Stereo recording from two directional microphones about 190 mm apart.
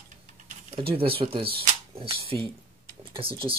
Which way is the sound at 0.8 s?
30° right (ahead or behind).